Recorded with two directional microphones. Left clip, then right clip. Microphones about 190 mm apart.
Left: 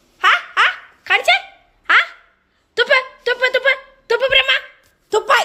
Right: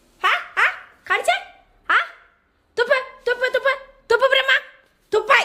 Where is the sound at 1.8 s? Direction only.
Centre (ahead or behind).